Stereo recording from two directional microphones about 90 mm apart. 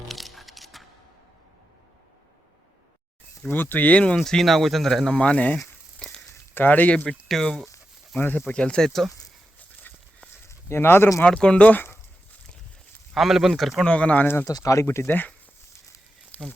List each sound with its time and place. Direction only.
0.1 s music: centre (ahead or behind)
3.5 s speech: 20° left (ahead or behind)
5.5 s a sound: 5° left (ahead or behind)
6.5 s speech: 20° left (ahead or behind)
7.3 s speech: 5° left (ahead or behind)
8.1 s speech: 20° left (ahead or behind); by 9.1 s 5° left (ahead or behind)
9.9 s a sound: 20° left (ahead or behind)
10.7 s speech: 25° left (ahead or behind)
11.2 s speech: 10° left (ahead or behind)
13.1 s speech: 5° right (ahead or behind)
13.8 s speech: 10° left (ahead or behind)
14.4 s speech: 40° left (ahead or behind)
14.8 s speech: 20° left (ahead or behind)
16.3 s a sound: 20° left (ahead or behind)